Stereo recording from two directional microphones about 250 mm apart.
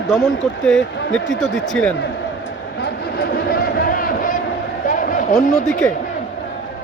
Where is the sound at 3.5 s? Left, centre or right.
Left.